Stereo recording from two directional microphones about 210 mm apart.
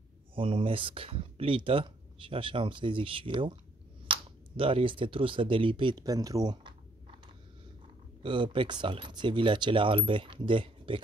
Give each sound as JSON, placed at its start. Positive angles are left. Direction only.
{"t": 0.3, "sound": "speech", "side_deg": -25}
{"t": 8.2, "sound": "speech", "side_deg": -25}